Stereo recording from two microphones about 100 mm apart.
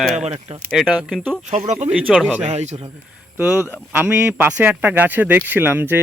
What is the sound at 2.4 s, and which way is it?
Speech, 90° right.